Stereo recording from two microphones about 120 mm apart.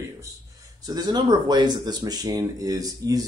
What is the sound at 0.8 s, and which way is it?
Speech, 35° right (ahead or behind).